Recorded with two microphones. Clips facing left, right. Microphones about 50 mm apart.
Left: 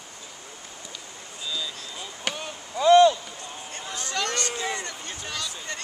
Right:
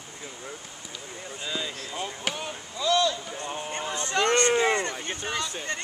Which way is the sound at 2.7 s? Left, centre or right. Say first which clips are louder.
Left 9 dB; left.